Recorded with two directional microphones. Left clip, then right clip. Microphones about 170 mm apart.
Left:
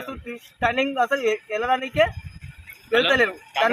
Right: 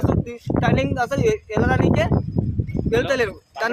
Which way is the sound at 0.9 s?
20° right (ahead or behind).